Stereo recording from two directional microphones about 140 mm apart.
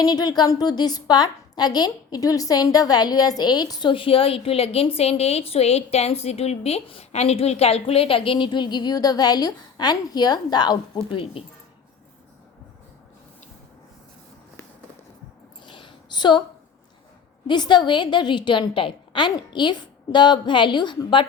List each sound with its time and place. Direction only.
0.0 s a woman's voice: 30° left (ahead or behind)
15.6 s a sound: 35° left (ahead or behind)
17.4 s a woman's voice: 30° left (ahead or behind)